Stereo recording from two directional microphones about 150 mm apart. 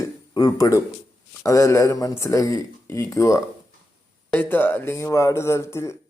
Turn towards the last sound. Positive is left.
turn(degrees=20)  # may be behind; listen again after turning